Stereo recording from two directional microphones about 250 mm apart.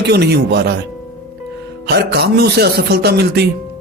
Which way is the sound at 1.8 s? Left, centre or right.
Right.